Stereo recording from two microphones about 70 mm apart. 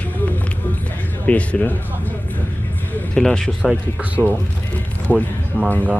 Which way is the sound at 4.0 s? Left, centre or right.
Right.